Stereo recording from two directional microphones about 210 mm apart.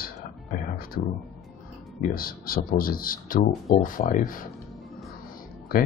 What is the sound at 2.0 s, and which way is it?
Speech, 45° left (ahead or behind).